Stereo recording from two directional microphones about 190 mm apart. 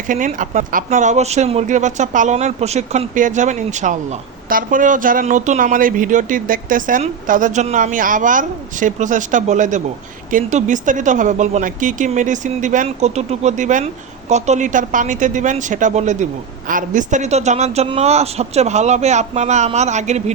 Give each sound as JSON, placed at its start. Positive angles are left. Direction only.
{"t": 0.1, "sound": "speech", "side_deg": -45}